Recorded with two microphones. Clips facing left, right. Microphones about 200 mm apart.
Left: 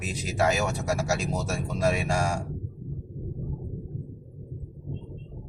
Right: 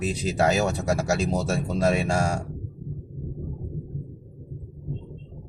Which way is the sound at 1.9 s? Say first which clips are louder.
Right 3 dB; 30° right (ahead or behind).